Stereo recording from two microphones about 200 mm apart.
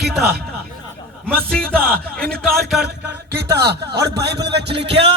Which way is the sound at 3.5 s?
55° right (ahead or behind).